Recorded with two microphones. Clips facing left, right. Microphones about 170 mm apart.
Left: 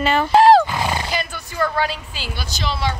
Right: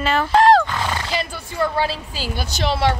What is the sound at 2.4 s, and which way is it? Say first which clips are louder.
Speech: right 5 dB; 65° right (ahead or behind).